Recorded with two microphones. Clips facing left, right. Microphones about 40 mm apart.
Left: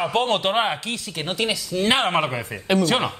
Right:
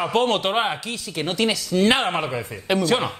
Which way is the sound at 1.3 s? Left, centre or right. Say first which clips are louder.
Right 2 dB; left.